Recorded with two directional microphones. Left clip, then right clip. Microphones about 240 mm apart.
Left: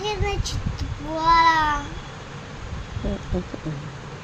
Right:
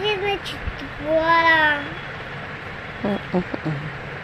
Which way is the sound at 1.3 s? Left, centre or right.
Left.